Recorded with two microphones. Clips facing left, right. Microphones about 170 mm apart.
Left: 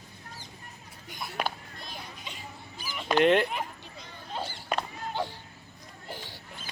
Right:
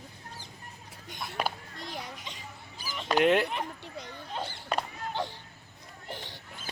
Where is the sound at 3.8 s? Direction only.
75° right (ahead or behind).